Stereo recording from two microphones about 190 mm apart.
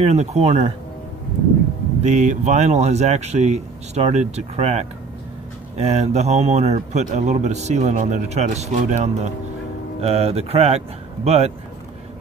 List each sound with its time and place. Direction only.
0.0 s speech: 35° right (ahead or behind)
2.0 s speech: 40° right (ahead or behind)